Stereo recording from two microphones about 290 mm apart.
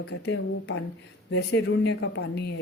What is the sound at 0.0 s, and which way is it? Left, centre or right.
Speech, left.